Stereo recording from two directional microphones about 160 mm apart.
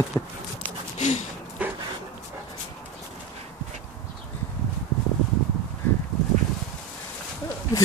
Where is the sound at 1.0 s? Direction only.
45° left (ahead or behind).